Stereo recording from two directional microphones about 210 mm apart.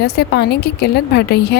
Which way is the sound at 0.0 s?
50° left (ahead or behind).